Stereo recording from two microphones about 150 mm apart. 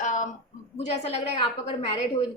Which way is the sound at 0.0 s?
55° left (ahead or behind).